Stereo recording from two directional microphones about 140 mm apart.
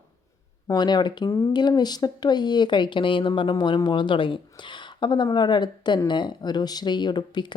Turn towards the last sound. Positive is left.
turn(degrees=30)  # may be behind; listen again after turning